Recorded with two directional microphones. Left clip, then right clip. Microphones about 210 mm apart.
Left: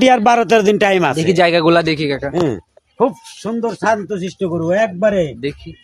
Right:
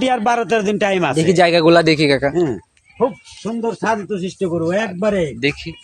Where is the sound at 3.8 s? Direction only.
40° left (ahead or behind).